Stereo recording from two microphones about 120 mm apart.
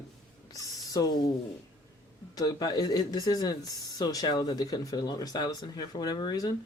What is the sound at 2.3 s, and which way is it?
Speech, 30° left (ahead or behind).